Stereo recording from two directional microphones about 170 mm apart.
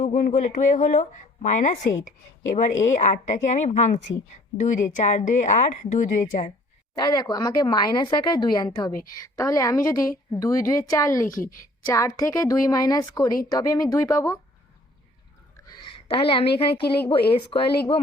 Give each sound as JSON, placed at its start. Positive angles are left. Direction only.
{"t": 0.0, "sound": "a woman's voice", "side_deg": 50}
{"t": 7.0, "sound": "a woman's voice", "side_deg": 25}
{"t": 15.5, "sound": "a sound", "side_deg": 30}
{"t": 16.6, "sound": "a woman's voice", "side_deg": 30}